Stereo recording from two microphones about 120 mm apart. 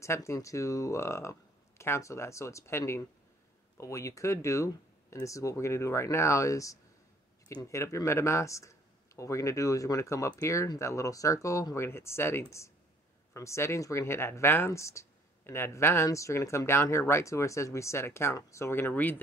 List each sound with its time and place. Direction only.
0.0 s speech: 25° left (ahead or behind)